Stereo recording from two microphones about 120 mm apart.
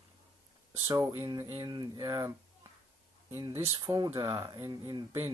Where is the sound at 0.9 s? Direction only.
30° right (ahead or behind).